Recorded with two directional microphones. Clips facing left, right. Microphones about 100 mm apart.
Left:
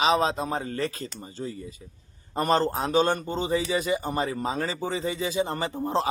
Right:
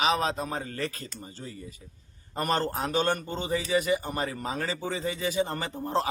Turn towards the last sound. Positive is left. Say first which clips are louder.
# left 2 dB
turn(degrees=15)  # may be behind; listen again after turning